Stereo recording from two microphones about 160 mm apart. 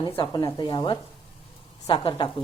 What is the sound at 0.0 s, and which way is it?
A woman's voice, 30° left (ahead or behind).